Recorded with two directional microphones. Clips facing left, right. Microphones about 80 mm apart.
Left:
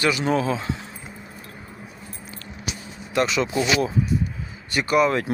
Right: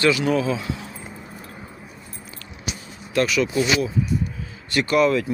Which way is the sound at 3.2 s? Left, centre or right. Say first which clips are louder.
Right 1 dB; left.